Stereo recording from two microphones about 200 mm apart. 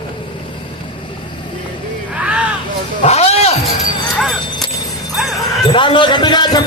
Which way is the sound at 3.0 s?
30° left (ahead or behind).